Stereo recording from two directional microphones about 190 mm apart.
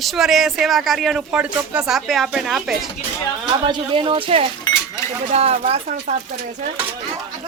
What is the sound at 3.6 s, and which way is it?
Speech, 25° right (ahead or behind).